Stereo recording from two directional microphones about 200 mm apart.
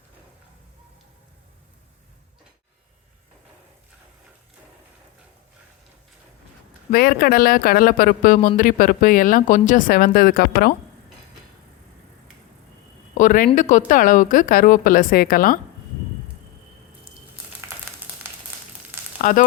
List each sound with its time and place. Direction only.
6.9 s speech: 50° left (ahead or behind)
13.1 s speech: 40° left (ahead or behind)
19.2 s frying: 40° left (ahead or behind)